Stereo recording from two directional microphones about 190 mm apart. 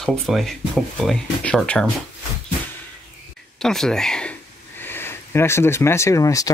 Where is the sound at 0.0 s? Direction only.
Centre (ahead or behind).